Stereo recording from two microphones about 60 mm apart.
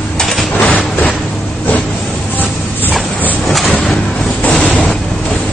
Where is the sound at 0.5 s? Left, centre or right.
Left.